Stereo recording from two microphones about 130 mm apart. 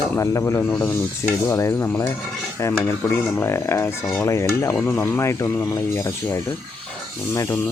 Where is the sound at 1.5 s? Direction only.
20° left (ahead or behind).